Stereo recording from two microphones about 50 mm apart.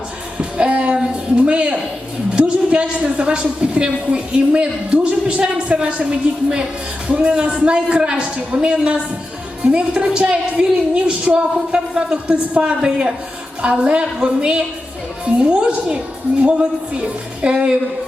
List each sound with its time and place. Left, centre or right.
0.3 s a woman's voice: right